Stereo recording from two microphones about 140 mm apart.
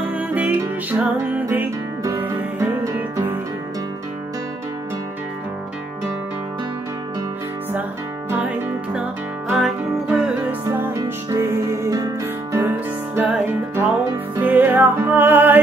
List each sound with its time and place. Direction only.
0.1 s music: 10° right (ahead or behind)
8.3 s music: 10° right (ahead or behind)